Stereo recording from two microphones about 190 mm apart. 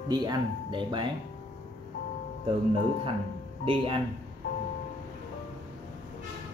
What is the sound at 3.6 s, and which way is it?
Speech, 30° right (ahead or behind).